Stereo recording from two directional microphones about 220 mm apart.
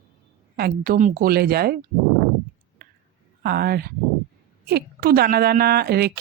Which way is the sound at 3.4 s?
45° right (ahead or behind).